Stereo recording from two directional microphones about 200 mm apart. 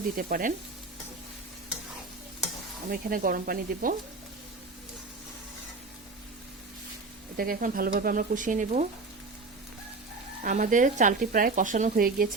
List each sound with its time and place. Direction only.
0.2 s speech: 45° right (ahead or behind)
2.9 s speech: 45° right (ahead or behind)
7.3 s speech: 45° right (ahead or behind)
10.4 s speech: 40° right (ahead or behind)